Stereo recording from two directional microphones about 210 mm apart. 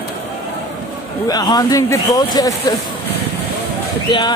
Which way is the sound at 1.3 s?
20° left (ahead or behind).